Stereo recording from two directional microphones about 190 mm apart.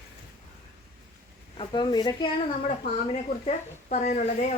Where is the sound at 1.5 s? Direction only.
25° left (ahead or behind).